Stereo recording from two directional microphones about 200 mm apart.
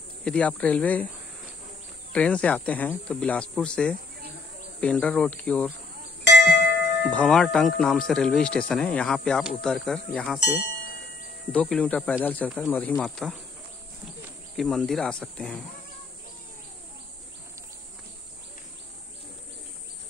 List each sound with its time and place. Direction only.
0.2 s speech: 5° left (ahead or behind)
2.1 s speech: 5° left (ahead or behind)
6.2 s music: 55° left (ahead or behind)
7.1 s speech: 5° left (ahead or behind)
10.4 s ding: 50° left (ahead or behind)
11.5 s speech: 5° left (ahead or behind)
14.6 s speech: centre (ahead or behind)